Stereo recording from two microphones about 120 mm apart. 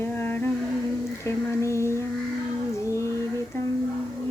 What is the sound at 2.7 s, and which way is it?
Female singing, 25° left (ahead or behind).